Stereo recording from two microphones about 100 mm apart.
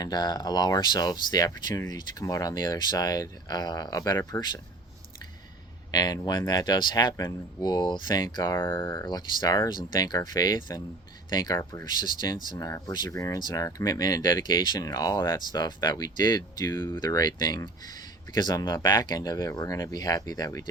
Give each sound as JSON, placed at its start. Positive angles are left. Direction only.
{"t": 0.0, "sound": "speech", "side_deg": 45}
{"t": 5.9, "sound": "speech", "side_deg": 40}
{"t": 8.4, "sound": "speech", "side_deg": 25}
{"t": 9.0, "sound": "speech", "side_deg": 45}
{"t": 11.5, "sound": "speech", "side_deg": 30}
{"t": 11.9, "sound": "speech", "side_deg": 45}